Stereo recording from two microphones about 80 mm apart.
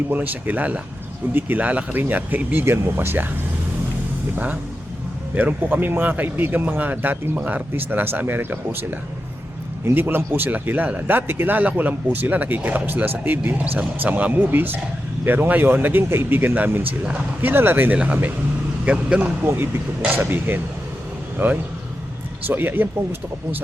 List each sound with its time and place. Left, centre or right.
0.1 s speech: right
5.3 s speech: right
17.9 s a man's voice: centre